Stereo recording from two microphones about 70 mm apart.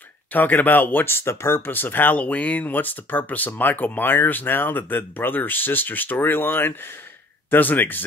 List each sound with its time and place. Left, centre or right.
0.3 s speech: left